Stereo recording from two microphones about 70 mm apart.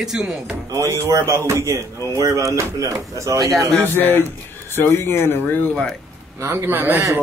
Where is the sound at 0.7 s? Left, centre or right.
Right.